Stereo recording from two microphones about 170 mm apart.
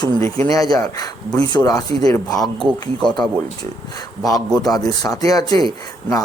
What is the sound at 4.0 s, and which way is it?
Speech, 20° left (ahead or behind).